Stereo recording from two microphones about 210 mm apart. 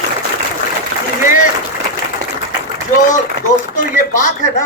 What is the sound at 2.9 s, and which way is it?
Speech, 40° left (ahead or behind).